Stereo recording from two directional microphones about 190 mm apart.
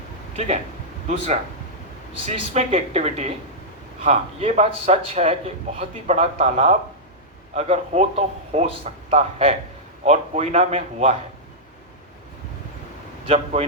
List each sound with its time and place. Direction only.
0.3 s speech: 35° right (ahead or behind)
2.1 s a man's voice: 30° right (ahead or behind)
13.2 s a man's voice: 35° right (ahead or behind)